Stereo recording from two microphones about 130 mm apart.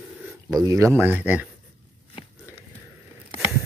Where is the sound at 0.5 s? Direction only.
25° right (ahead or behind).